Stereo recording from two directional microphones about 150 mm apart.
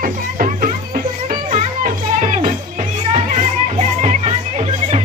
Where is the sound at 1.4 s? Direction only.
50° right (ahead or behind).